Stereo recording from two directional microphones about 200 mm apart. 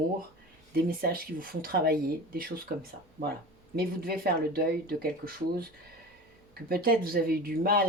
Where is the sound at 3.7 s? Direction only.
50° right (ahead or behind).